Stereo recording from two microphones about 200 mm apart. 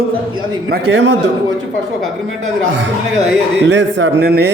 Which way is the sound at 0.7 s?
60° right (ahead or behind).